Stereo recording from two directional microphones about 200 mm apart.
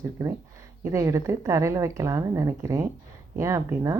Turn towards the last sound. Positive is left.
turn(degrees=-15)  # may be behind; listen again after turning